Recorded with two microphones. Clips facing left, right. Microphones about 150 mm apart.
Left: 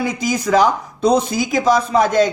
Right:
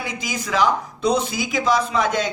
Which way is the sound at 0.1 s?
40° left (ahead or behind).